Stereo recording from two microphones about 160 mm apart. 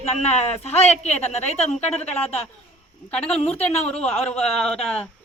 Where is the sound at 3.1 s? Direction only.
10° left (ahead or behind).